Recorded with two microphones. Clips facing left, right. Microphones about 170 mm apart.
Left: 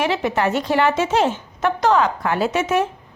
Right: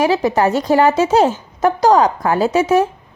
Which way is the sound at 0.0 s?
35° right (ahead or behind).